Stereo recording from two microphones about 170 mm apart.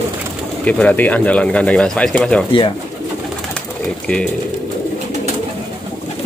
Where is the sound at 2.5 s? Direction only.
30° left (ahead or behind).